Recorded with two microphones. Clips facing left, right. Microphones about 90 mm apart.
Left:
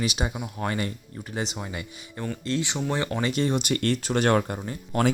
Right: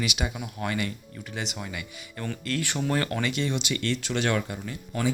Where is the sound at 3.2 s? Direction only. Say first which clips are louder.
Left 4 dB; 40° left (ahead or behind).